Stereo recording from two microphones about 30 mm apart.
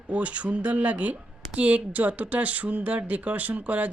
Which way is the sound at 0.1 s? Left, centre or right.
Right.